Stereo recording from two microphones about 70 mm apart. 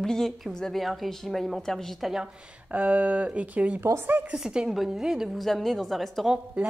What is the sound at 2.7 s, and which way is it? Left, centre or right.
Speech, centre.